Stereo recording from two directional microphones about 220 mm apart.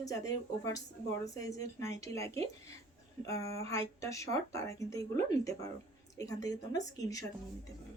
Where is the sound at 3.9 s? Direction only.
15° left (ahead or behind).